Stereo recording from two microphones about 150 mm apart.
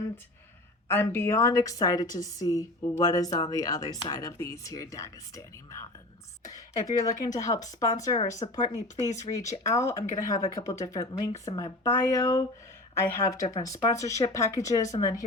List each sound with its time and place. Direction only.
0.9 s a woman's voice: 15° left (ahead or behind)
6.5 s a woman's voice: 25° left (ahead or behind)
8.4 s speech: 35° left (ahead or behind)
9.0 s a woman's voice: 20° left (ahead or behind)